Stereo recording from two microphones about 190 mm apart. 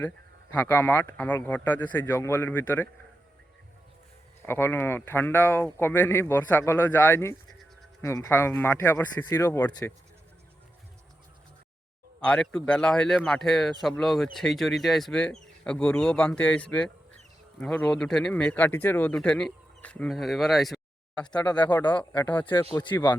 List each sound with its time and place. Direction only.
0.5 s speech: 10° left (ahead or behind)
4.4 s speech: 10° left (ahead or behind)
12.2 s speech: 5° left (ahead or behind)
21.9 s speech: 20° left (ahead or behind)
22.3 s speech: 10° left (ahead or behind)
22.8 s speech: 25° left (ahead or behind)